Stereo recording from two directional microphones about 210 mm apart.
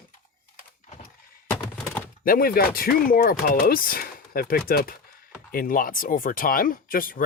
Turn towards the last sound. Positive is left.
turn(degrees=40)  # may be behind; listen again after turning